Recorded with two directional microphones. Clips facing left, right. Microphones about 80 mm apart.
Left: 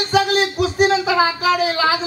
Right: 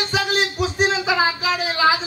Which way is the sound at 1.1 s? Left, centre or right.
Left.